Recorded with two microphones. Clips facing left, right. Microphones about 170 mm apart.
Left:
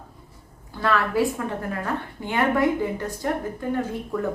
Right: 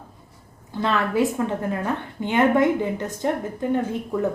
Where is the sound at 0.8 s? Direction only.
20° right (ahead or behind).